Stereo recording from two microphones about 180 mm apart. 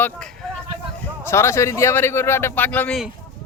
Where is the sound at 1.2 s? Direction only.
15° left (ahead or behind).